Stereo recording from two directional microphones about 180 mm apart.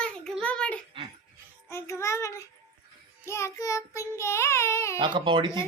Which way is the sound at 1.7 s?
15° left (ahead or behind).